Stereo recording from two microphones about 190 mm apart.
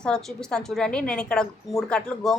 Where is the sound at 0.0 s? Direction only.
5° left (ahead or behind).